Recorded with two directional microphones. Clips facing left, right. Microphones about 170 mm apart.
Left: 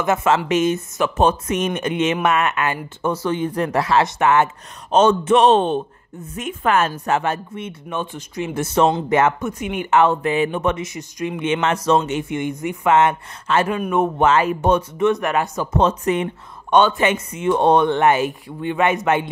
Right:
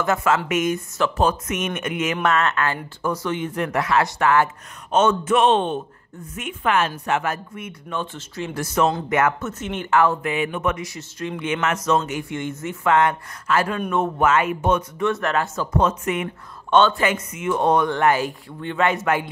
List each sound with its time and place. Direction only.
0.0 s speech: 20° left (ahead or behind)
2.2 s a woman's voice: 15° left (ahead or behind)
8.0 s speech: 15° left (ahead or behind)
9.4 s speech: 10° left (ahead or behind); by 12.0 s 30° left (ahead or behind)
12.1 s speech: 20° left (ahead or behind)
14.2 s a woman's voice: 30° left (ahead or behind)
15.0 s speech: 20° left (ahead or behind)
15.8 s a woman's voice: 35° left (ahead or behind)
16.7 s speech: 20° left (ahead or behind)